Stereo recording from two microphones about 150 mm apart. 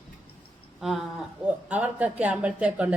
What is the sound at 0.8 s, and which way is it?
Speech, 5° right (ahead or behind).